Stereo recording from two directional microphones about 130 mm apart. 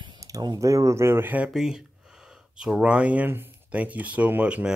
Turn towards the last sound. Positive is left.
turn(degrees=-10)  # may be behind; listen again after turning